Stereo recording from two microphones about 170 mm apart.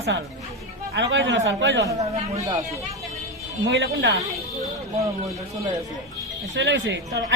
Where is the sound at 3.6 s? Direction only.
90° right.